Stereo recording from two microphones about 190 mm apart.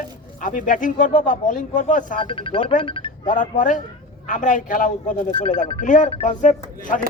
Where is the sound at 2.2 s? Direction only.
25° left (ahead or behind).